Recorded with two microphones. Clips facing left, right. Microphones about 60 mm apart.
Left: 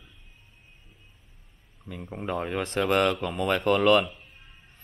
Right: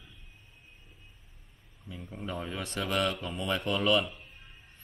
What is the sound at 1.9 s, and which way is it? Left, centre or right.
Speech, left.